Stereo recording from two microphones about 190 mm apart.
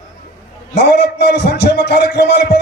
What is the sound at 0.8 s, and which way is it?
A man's voice, 60° left (ahead or behind).